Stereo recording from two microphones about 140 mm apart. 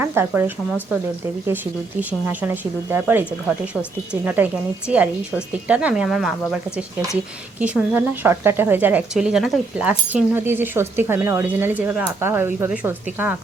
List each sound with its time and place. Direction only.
0.0 s speech: 15° right (ahead or behind)
2.0 s speech: 10° right (ahead or behind)
7.6 s speech: 10° right (ahead or behind)